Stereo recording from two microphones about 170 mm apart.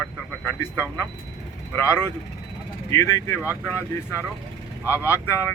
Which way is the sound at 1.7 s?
15° left (ahead or behind).